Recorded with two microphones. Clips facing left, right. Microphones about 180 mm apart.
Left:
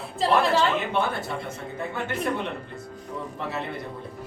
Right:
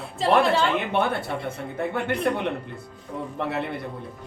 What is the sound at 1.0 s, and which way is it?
Speech, 55° right (ahead or behind).